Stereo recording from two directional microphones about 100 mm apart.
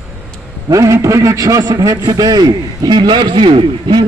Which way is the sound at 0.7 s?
30° right (ahead or behind).